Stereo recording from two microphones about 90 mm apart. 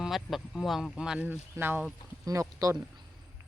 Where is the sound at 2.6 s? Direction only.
40° right (ahead or behind).